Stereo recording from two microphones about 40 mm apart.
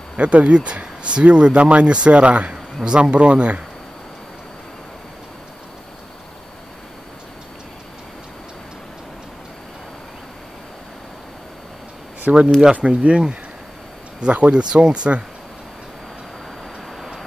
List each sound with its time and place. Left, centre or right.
0.2 s speech: right
2.5 s a sound: right
3.0 s speech: right
12.3 s speech: right